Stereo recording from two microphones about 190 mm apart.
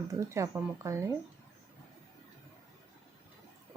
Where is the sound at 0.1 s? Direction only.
15° right (ahead or behind).